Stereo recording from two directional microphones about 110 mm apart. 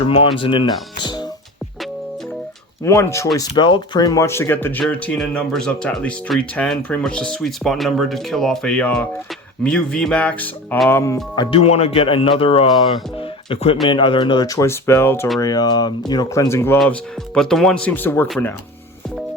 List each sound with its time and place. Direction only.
0.0 s speech: 55° left (ahead or behind); by 1.3 s 40° left (ahead or behind)
2.8 s speech: 25° left (ahead or behind)
3.3 s speech: 40° left (ahead or behind); by 11.2 s 25° left (ahead or behind)
11.5 s speech: 65° left (ahead or behind)
13.1 s music: 60° left (ahead or behind)
13.8 s speech: 45° left (ahead or behind)
14.4 s speech: 30° left (ahead or behind)
15.4 s speech: 35° left (ahead or behind)
16.5 s speech: 25° left (ahead or behind)
16.9 s speech: 5° left (ahead or behind)
17.8 s speech: 15° left (ahead or behind)